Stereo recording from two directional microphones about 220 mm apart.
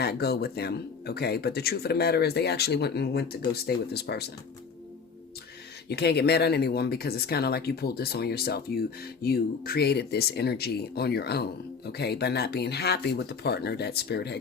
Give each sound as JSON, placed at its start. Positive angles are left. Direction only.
{"t": 0.0, "sound": "speech", "side_deg": 45}
{"t": 5.9, "sound": "speech", "side_deg": 50}